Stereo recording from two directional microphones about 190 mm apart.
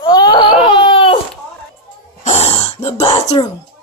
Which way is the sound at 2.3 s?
35° left (ahead or behind).